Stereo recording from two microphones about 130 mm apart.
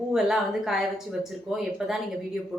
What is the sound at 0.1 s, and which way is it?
A woman's voice, centre (ahead or behind).